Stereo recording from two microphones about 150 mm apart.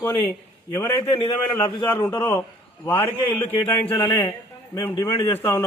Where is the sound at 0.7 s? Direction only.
15° left (ahead or behind).